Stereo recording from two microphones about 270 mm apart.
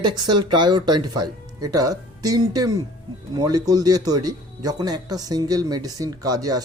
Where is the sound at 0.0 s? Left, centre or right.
Centre.